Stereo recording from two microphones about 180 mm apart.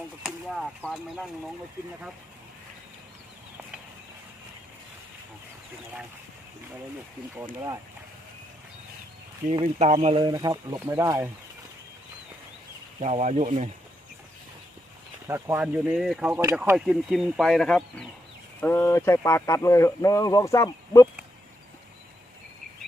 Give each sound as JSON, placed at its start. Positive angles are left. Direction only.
{"t": 0.2, "sound": "speech", "side_deg": 0}
{"t": 9.6, "sound": "speech", "side_deg": -35}
{"t": 13.0, "sound": "speech", "side_deg": -40}
{"t": 15.3, "sound": "speech", "side_deg": -10}